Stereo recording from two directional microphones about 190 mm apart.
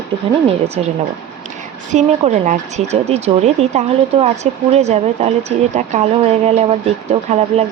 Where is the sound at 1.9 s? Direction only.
40° right (ahead or behind).